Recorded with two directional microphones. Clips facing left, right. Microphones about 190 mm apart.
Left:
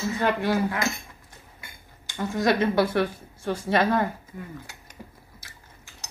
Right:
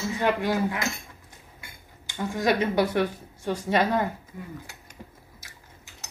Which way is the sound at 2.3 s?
15° right (ahead or behind).